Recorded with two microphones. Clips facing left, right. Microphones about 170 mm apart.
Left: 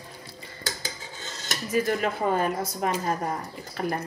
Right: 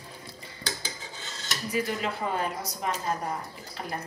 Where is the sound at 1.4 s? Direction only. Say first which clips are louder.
Left 4 dB; 50° left (ahead or behind).